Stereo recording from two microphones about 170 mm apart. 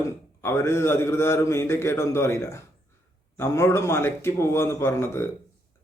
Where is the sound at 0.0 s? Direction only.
15° left (ahead or behind).